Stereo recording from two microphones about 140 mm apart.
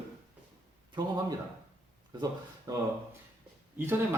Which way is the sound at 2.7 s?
25° right (ahead or behind).